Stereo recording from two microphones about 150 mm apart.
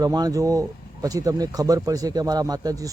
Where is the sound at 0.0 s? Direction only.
25° right (ahead or behind).